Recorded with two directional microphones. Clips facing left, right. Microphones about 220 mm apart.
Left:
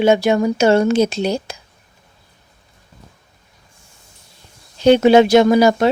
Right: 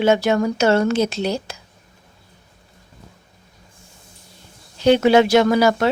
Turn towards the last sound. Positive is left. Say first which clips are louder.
# left 4 dB
turn(degrees=20)  # may be behind; listen again after turning